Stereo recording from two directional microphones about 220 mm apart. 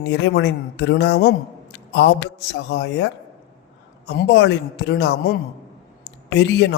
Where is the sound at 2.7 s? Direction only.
50° left (ahead or behind).